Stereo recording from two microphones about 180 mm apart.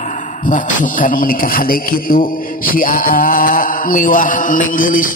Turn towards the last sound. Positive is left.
turn(degrees=50)  # may be behind; listen again after turning